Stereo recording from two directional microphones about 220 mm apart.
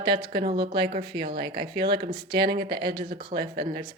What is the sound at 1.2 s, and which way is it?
Speech, 45° right (ahead or behind).